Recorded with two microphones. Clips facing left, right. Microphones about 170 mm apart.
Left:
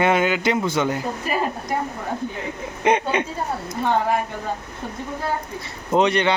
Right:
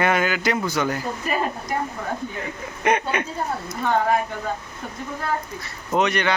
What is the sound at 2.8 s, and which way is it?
Speech, 25° left (ahead or behind).